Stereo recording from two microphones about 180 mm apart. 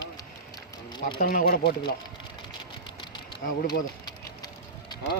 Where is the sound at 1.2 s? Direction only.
55° left (ahead or behind).